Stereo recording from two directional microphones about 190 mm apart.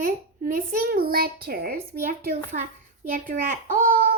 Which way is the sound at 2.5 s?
40° right (ahead or behind).